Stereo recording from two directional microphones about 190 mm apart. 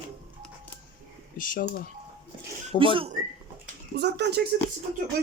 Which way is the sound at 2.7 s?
35° left (ahead or behind).